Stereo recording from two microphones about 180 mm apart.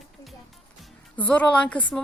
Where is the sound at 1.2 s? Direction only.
10° left (ahead or behind).